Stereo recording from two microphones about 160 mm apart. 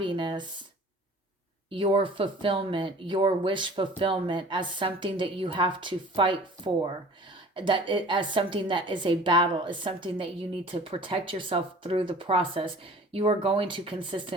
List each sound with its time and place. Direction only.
0.0 s speech: 30° right (ahead or behind)
1.7 s speech: 30° right (ahead or behind)
7.5 s speech: 30° right (ahead or behind)